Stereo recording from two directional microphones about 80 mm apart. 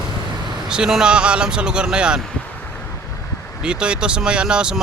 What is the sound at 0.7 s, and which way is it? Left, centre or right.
Speech, centre.